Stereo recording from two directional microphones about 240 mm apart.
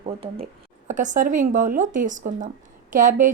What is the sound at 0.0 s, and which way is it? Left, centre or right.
A woman's voice, right.